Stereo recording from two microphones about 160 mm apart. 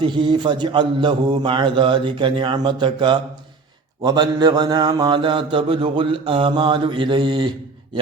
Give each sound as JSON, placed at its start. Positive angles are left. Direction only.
{"t": 0.0, "sound": "a man's voice", "side_deg": -30}
{"t": 4.0, "sound": "mantra", "side_deg": -25}